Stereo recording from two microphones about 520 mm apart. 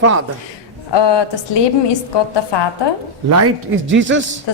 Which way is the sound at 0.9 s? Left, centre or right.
Left.